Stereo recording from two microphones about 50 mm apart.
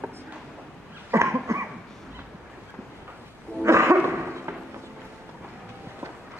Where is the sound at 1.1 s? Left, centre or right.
Right.